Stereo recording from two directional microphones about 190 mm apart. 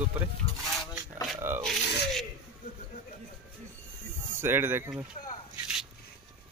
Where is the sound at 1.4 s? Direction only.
10° right (ahead or behind).